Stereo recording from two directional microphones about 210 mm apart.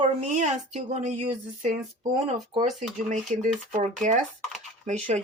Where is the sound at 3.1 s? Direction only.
35° right (ahead or behind).